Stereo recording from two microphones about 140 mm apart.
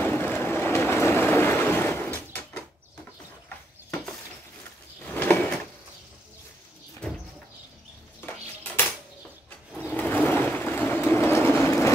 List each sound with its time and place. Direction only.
0.0 s boat: 15° left (ahead or behind)
5.0 s a sound: 10° left (ahead or behind)
8.2 s dishes: 15° left (ahead or behind)
9.8 s train: 15° left (ahead or behind)